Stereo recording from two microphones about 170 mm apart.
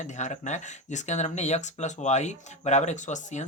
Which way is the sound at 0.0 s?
45° left (ahead or behind).